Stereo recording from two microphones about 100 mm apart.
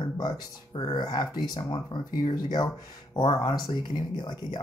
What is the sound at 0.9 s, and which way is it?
Speech, 50° left (ahead or behind).